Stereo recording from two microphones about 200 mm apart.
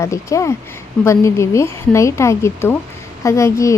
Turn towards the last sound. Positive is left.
turn(degrees=15)  # may be behind; listen again after turning